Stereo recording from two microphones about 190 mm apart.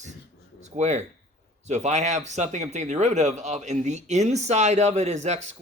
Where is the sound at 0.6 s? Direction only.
35° right (ahead or behind).